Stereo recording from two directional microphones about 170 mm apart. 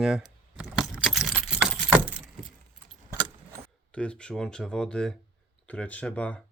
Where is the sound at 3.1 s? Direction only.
20° right (ahead or behind).